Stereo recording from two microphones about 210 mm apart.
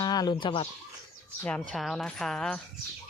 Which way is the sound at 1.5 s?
5° left (ahead or behind).